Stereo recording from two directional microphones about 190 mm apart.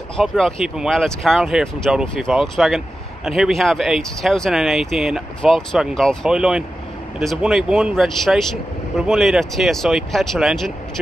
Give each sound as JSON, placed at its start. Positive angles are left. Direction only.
{"t": 0.2, "sound": "speech", "side_deg": 0}